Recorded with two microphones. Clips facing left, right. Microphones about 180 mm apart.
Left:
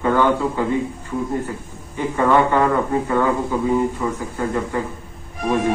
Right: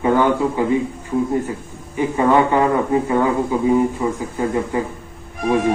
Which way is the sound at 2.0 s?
15° right (ahead or behind).